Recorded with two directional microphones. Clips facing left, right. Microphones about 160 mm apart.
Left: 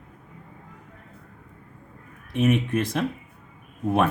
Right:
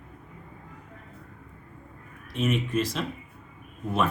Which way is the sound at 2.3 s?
55° left (ahead or behind).